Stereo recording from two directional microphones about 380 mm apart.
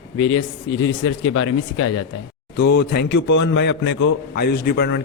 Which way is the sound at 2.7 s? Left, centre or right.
Left.